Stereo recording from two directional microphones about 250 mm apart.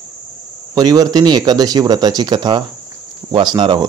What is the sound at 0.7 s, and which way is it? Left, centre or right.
Speech, centre.